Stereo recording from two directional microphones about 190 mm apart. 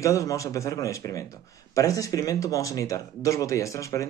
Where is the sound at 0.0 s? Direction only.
15° left (ahead or behind).